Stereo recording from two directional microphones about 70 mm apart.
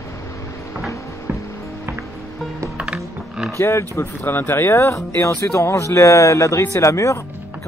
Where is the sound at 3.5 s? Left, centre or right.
Left.